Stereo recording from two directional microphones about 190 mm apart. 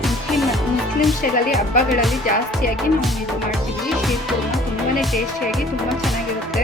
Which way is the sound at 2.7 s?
Centre (ahead or behind).